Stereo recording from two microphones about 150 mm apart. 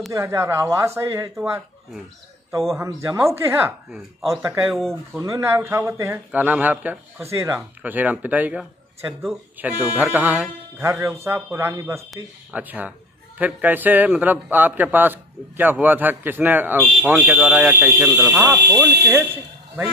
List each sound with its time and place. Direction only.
0.1 s speech: 20° right (ahead or behind)
2.8 s speech: 20° right (ahead or behind)
4.6 s speech: centre (ahead or behind)
5.2 s speech: 20° right (ahead or behind)